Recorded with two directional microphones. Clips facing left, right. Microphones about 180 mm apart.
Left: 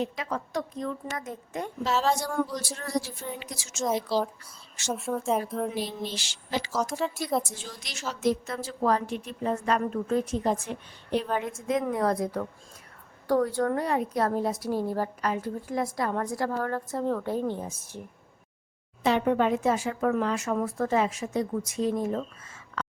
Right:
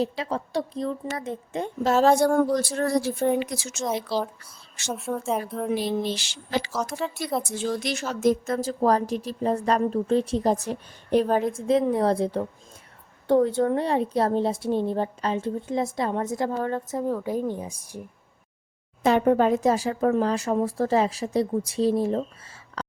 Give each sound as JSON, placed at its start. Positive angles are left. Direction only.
{"t": 0.0, "sound": "a woman's voice", "side_deg": -30}
{"t": 1.8, "sound": "a woman's voice", "side_deg": -50}
{"t": 3.8, "sound": "speech", "side_deg": 0}
{"t": 5.7, "sound": "a woman's voice", "side_deg": -65}
{"t": 6.9, "sound": "speech", "side_deg": 0}
{"t": 7.4, "sound": "a woman's voice", "side_deg": -60}
{"t": 19.0, "sound": "a woman's voice", "side_deg": -45}
{"t": 22.8, "sound": "a sound", "side_deg": -35}